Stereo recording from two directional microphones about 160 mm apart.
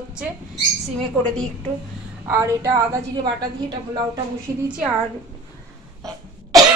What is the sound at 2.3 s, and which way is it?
A woman's voice, 20° right (ahead or behind).